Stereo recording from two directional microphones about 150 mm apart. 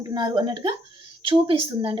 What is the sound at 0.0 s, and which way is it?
A woman's voice, 25° right (ahead or behind).